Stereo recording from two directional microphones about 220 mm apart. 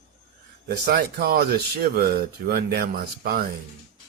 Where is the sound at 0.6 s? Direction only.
45° right (ahead or behind).